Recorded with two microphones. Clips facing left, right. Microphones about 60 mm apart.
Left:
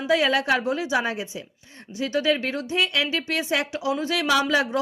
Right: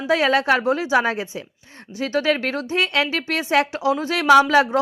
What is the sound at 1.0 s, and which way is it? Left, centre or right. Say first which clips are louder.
Speech: right 5 dB; right.